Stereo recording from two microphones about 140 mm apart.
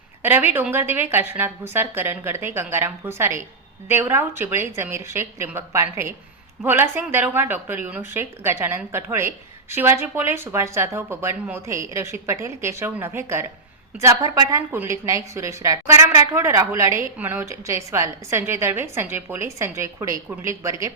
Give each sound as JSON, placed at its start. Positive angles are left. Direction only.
{"t": 0.2, "sound": "a woman's voice", "side_deg": -15}